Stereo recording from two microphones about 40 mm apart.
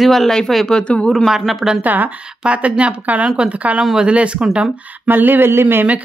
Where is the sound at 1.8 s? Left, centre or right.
Right.